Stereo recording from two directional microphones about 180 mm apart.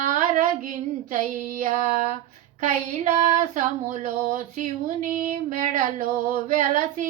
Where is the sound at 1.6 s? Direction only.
45° right (ahead or behind).